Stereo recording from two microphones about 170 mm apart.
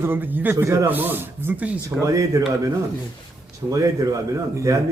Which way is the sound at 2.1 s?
20° right (ahead or behind).